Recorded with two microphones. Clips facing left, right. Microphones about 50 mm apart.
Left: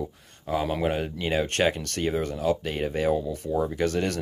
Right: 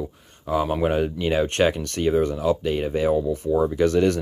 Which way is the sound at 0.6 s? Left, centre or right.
Centre.